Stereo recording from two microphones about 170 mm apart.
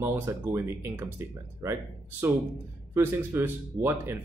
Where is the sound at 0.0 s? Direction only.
15° right (ahead or behind).